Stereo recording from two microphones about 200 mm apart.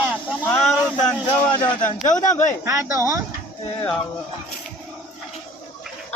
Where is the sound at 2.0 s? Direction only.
40° left (ahead or behind).